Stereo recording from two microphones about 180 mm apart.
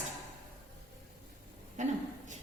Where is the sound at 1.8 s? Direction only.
40° right (ahead or behind).